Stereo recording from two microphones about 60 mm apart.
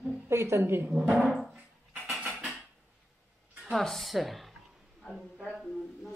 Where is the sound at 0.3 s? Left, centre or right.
Right.